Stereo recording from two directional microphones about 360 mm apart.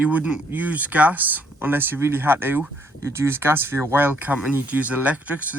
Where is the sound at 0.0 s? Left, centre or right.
Centre.